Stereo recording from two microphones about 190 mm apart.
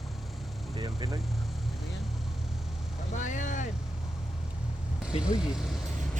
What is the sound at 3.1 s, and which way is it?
Vehicle, 40° left (ahead or behind).